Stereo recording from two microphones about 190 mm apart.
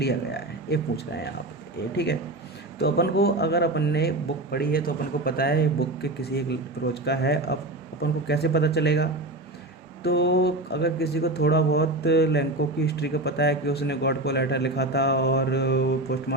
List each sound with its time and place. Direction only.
0.0 s speech: 60° left (ahead or behind)
2.7 s a man's voice: 55° left (ahead or behind)